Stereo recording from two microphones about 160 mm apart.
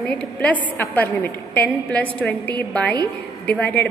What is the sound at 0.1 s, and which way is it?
A woman's voice, 10° left (ahead or behind).